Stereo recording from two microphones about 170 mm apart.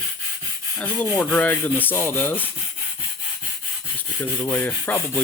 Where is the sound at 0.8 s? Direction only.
10° left (ahead or behind).